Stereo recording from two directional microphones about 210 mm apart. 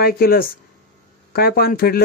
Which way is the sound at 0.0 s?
45° left (ahead or behind).